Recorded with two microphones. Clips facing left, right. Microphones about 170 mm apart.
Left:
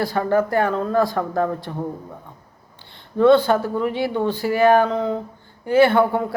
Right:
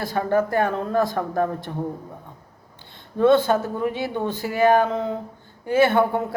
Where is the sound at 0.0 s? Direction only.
20° right (ahead or behind).